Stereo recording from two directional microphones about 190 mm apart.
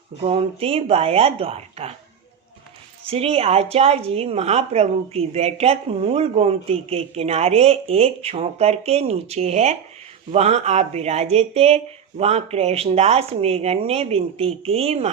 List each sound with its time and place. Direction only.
0.2 s a woman's voice: 30° right (ahead or behind)
3.1 s a woman's voice: 30° right (ahead or behind)